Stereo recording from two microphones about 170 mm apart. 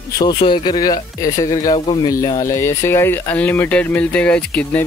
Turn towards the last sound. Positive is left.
turn(degrees=10)  # may be behind; listen again after turning